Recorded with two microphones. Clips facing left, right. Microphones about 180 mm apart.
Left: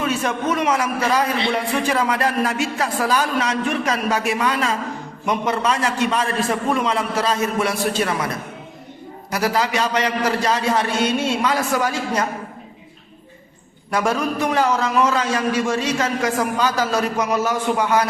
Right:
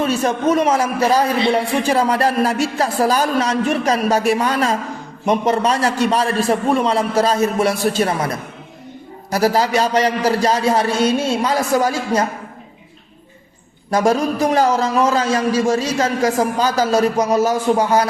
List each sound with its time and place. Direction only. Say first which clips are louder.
0.0 s a man's voice: right 5 dB; 35° right (ahead or behind)
9.3 s a man's voice: right 5 dB; 35° right (ahead or behind)
13.9 s a man's voice: right 5 dB; 35° right (ahead or behind)